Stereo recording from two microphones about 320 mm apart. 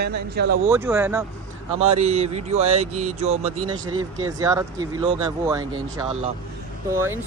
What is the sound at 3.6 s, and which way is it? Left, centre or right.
Speech, right.